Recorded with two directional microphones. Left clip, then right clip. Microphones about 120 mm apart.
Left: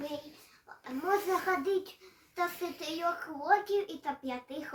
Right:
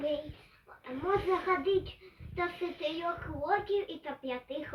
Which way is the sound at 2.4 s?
30° left (ahead or behind).